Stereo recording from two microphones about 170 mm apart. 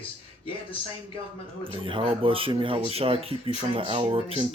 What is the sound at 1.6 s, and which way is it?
Speech, 30° right (ahead or behind).